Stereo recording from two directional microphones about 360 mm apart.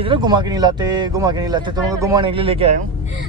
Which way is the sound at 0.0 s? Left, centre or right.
Centre.